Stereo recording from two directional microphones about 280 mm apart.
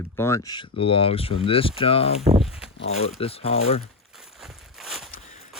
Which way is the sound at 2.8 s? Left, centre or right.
Left.